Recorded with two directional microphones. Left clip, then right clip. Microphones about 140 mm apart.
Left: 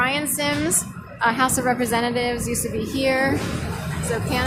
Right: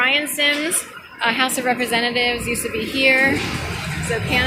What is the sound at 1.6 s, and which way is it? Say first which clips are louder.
Speech: right 2 dB; 20° left (ahead or behind).